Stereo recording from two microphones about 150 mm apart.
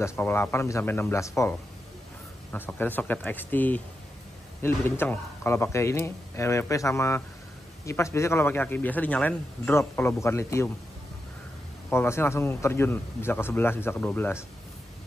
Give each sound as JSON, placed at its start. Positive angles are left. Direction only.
{"t": 0.0, "sound": "speech", "side_deg": 15}
{"t": 11.9, "sound": "speech", "side_deg": 15}